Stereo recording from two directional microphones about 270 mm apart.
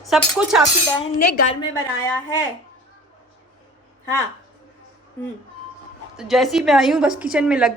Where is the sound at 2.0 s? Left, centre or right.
Centre.